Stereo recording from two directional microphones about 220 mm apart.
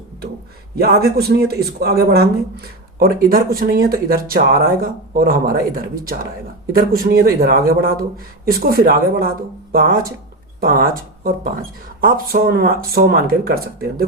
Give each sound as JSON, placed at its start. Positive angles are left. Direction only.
{"t": 0.8, "sound": "speech", "side_deg": -45}